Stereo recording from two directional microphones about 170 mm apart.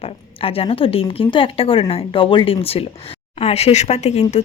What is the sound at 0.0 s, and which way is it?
Speech, 35° left (ahead or behind).